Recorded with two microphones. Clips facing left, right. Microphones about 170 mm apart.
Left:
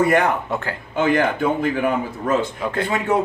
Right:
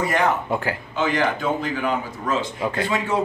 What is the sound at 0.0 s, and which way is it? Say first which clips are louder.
A man's voice: left 4 dB; 55° left (ahead or behind).